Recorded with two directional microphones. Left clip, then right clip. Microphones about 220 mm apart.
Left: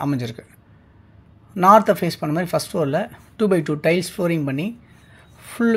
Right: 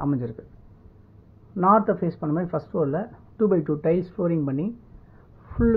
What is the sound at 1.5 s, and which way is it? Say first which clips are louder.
Speech: left 6 dB; 25° left (ahead or behind).